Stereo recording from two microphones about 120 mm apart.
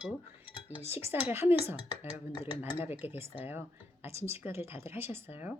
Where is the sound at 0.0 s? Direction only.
10° right (ahead or behind).